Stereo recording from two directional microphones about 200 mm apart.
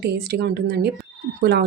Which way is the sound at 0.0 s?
55° right (ahead or behind).